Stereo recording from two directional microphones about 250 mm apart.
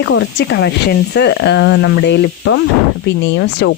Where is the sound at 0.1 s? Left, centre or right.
Left.